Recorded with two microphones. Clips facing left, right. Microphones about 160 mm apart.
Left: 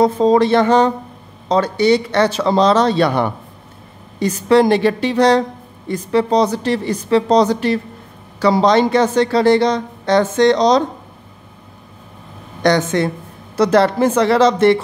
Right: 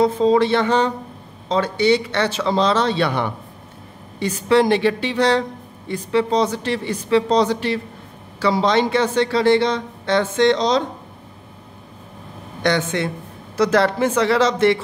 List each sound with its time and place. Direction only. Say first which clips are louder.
0.0 s speech: left 3 dB; 40° left (ahead or behind)
12.6 s speech: left 5 dB; 40° left (ahead or behind)